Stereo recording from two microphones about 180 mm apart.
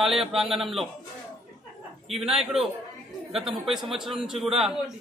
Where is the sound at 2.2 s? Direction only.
Centre (ahead or behind).